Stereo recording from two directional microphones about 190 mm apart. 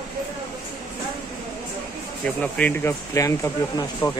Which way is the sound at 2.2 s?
5° left (ahead or behind).